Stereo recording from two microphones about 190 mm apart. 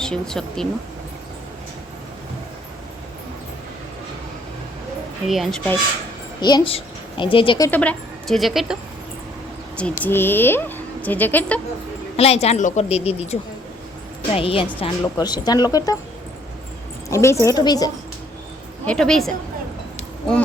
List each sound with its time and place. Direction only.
0.0 s speech: 5° left (ahead or behind)
5.3 s speech: centre (ahead or behind)
6.4 s a child's voice: 25° left (ahead or behind)
7.7 s speech: 5° left (ahead or behind)
10.0 s speech: 10° left (ahead or behind)
12.1 s a woman's voice: 30° left (ahead or behind)
17.1 s speech: 15° left (ahead or behind)
18.9 s speech: 5° left (ahead or behind)